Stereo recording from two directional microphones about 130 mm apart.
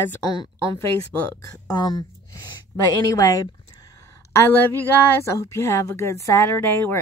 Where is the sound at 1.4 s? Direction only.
30° left (ahead or behind).